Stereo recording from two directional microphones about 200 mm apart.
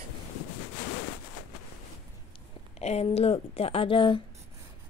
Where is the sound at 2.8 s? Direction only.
35° left (ahead or behind).